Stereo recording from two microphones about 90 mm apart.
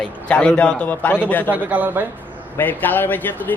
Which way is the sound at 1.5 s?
15° right (ahead or behind).